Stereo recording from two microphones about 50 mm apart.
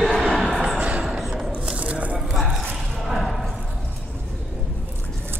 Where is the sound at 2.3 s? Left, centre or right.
Centre.